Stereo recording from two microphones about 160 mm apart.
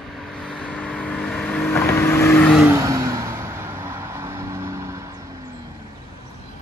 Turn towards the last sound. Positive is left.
turn(degrees=-20)  # may be behind; listen again after turning